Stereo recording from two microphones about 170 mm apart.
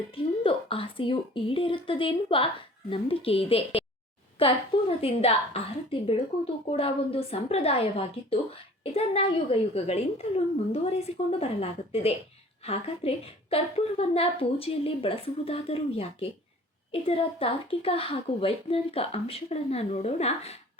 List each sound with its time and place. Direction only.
0.4 s a woman's voice: 30° left (ahead or behind)